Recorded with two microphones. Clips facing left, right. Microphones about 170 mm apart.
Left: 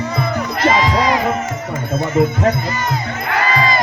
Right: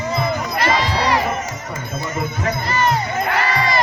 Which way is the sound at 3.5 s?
65° right (ahead or behind).